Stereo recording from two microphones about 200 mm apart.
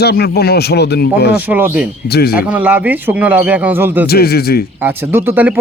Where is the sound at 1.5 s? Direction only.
10° right (ahead or behind).